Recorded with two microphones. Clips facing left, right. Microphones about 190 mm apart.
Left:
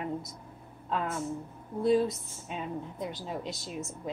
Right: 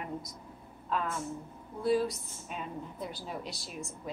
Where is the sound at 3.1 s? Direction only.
20° left (ahead or behind).